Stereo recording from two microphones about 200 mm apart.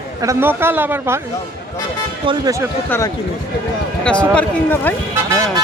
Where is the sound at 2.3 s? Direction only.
20° right (ahead or behind).